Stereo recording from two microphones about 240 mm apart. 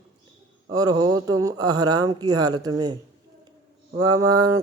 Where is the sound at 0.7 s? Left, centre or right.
Centre.